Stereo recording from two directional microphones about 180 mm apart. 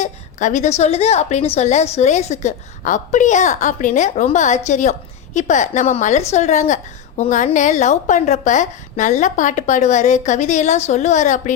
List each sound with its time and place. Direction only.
0.0 s a woman's voice: 45° left (ahead or behind)